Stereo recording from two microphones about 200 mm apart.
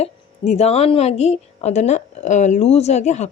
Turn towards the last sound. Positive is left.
turn(degrees=35)  # may be behind; listen again after turning